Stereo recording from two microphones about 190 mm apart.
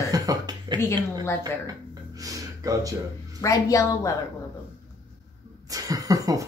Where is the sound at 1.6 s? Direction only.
20° right (ahead or behind).